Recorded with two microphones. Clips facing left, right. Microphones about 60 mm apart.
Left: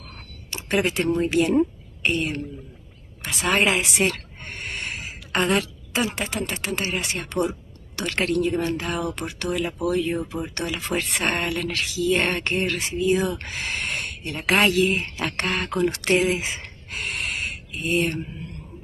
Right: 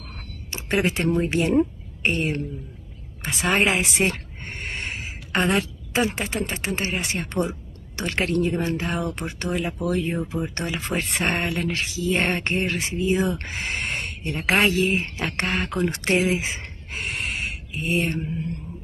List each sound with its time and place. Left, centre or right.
0.5 s a woman's voice: right
3.2 s a sound: right
6.3 s speech: right